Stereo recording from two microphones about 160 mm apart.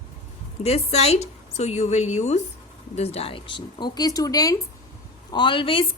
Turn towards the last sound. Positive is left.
turn(degrees=30)  # may be behind; listen again after turning